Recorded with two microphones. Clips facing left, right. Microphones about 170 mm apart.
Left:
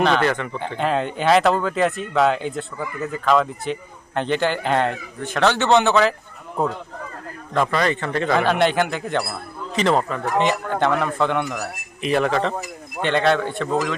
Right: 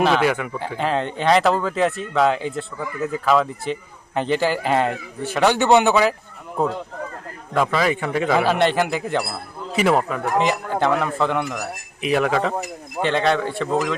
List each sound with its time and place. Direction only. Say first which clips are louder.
0.0 s speech: right 1 dB; 5° right (ahead or behind)
7.5 s speech: right 1 dB; 5° right (ahead or behind)